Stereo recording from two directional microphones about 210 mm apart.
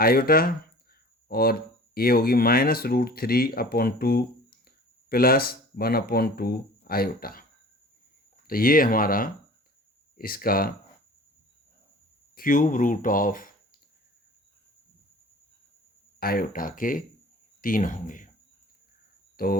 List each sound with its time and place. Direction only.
0.0 s speech: 45° left (ahead or behind)
8.4 s speech: 45° left (ahead or behind)
12.4 s speech: 40° left (ahead or behind)
16.2 s speech: 45° left (ahead or behind)
19.4 s speech: 45° left (ahead or behind)